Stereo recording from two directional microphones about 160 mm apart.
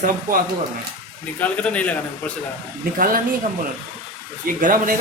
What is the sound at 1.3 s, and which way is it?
Speech, 10° left (ahead or behind).